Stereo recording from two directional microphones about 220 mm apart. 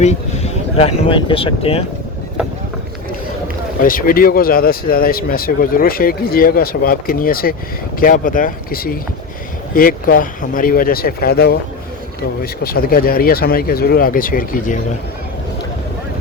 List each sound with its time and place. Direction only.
0.0 s speech: 30° left (ahead or behind)
3.8 s speech: 40° left (ahead or behind)
12.6 s speech: 45° left (ahead or behind)